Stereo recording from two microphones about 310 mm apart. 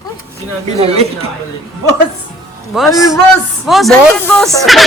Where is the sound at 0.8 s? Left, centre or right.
Centre.